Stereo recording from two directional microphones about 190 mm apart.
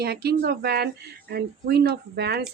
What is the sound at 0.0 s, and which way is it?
Speech, 55° right (ahead or behind).